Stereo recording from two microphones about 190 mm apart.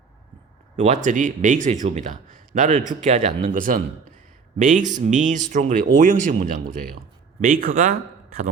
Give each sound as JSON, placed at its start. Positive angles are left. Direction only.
{"t": 0.8, "sound": "speech", "side_deg": -35}